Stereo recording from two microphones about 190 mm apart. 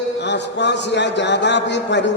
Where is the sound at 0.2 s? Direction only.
65° left (ahead or behind).